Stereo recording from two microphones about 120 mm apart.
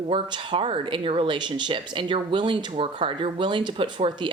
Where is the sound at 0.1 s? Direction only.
40° right (ahead or behind).